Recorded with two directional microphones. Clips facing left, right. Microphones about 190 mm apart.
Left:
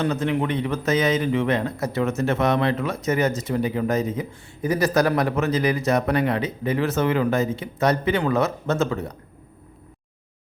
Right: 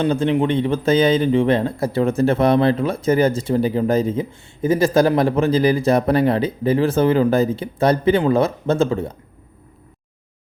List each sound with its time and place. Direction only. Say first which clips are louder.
0.0 s a man's voice: right 5 dB; 30° right (ahead or behind)